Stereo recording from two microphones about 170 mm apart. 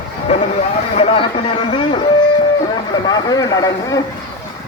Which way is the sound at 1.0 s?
35° left (ahead or behind).